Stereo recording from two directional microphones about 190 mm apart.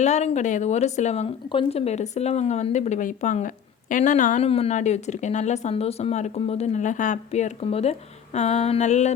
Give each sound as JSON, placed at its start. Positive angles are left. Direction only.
{"t": 0.0, "sound": "speech", "side_deg": 35}